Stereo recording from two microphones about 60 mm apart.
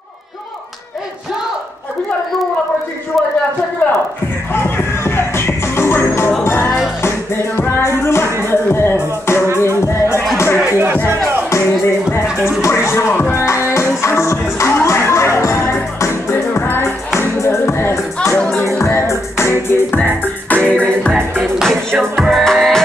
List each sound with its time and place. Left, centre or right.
4.5 s music: left
10.6 s music: right
11.5 s music: left
13.1 s music: left
13.4 s music: left
20.0 s music: left
21.5 s music: centre